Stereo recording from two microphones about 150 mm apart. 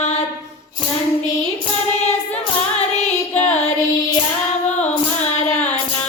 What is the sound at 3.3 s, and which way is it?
Child singing, 45° left (ahead or behind).